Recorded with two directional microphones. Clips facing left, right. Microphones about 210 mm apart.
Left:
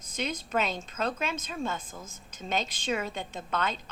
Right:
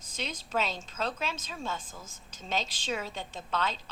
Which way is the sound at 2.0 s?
55° left (ahead or behind).